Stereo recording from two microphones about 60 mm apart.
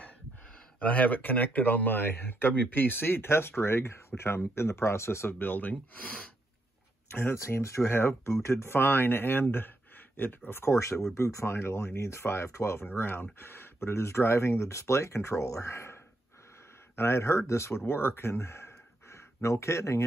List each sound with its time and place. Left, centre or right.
0.7 s speech: left
2.0 s speech: left
5.4 s speech: left
7.1 s speech: left